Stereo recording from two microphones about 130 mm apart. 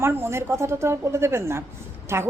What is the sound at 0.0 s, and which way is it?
A woman's voice, 20° right (ahead or behind).